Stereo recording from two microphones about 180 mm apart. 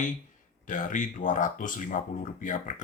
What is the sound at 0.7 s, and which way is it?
Speech, 45° left (ahead or behind).